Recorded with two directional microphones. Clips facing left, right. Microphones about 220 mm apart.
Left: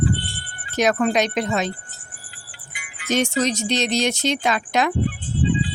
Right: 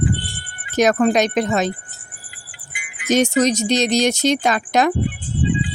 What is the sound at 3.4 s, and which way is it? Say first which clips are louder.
Speech: right 5 dB; 40° right (ahead or behind).